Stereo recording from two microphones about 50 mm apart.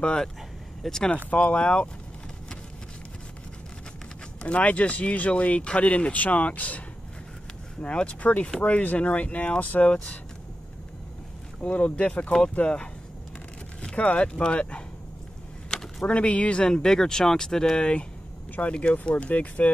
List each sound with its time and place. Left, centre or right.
0.0 s speech: centre
1.1 s speech: left
4.4 s speech: left
7.8 s speech: left
11.6 s speech: left
13.9 s speech: left
15.7 s a sound: centre
16.1 s speech: left